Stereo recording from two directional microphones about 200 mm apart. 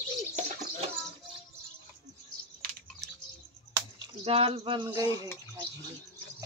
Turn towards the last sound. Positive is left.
turn(degrees=-25)  # may be behind; listen again after turning